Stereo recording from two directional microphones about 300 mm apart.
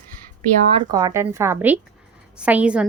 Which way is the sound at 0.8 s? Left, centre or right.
Centre.